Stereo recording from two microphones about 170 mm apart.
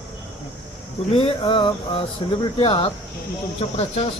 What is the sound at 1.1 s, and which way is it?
Speech, 30° left (ahead or behind).